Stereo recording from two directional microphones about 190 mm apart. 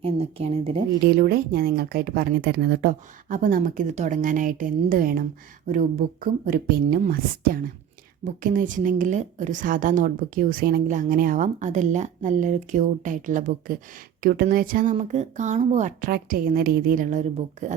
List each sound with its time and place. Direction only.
0.0 s a woman's voice: 30° right (ahead or behind)
1.0 s a woman's voice: 55° right (ahead or behind)
14.9 s a woman's voice: 35° right (ahead or behind)